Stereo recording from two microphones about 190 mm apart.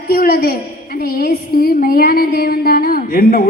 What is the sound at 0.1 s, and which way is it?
A woman's voice, 50° left (ahead or behind).